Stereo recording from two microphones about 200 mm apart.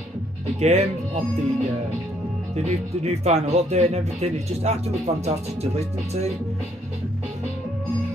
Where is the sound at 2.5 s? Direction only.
30° right (ahead or behind).